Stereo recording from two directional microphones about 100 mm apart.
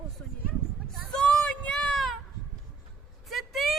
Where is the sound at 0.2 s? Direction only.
15° left (ahead or behind).